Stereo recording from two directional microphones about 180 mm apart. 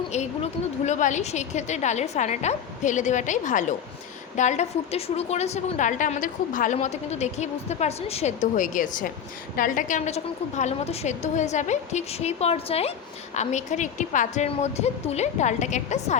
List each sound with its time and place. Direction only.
0.1 s a woman's voice: 40° left (ahead or behind)